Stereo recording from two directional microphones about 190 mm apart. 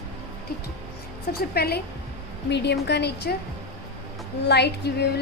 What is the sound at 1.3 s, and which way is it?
A woman's voice, 55° left (ahead or behind).